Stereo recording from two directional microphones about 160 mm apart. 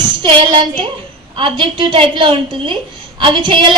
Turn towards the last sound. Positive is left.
turn(degrees=-30)  # may be behind; listen again after turning